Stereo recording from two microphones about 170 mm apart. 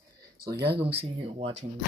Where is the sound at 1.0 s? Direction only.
35° right (ahead or behind).